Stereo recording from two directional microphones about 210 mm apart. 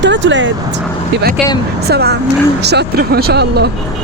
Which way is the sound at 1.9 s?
50° right (ahead or behind).